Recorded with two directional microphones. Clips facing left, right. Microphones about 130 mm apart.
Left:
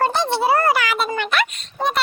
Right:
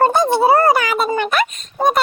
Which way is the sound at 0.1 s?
50° right (ahead or behind).